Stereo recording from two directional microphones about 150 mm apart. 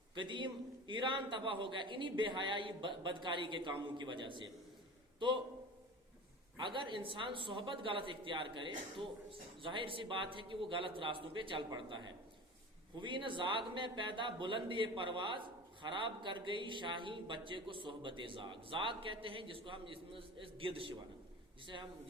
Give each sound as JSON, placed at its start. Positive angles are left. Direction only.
{"t": 0.2, "sound": "a man's voice", "side_deg": -30}
{"t": 6.6, "sound": "a man's voice", "side_deg": -35}